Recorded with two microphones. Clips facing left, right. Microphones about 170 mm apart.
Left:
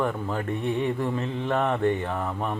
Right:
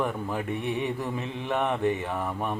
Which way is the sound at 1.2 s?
5° right (ahead or behind).